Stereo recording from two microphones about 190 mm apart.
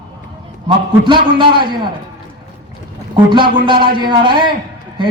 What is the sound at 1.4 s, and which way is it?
Speech, 25° right (ahead or behind).